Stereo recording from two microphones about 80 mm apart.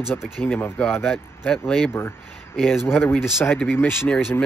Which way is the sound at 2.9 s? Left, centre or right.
Left.